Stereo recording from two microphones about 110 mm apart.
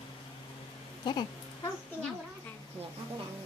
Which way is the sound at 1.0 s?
40° left (ahead or behind).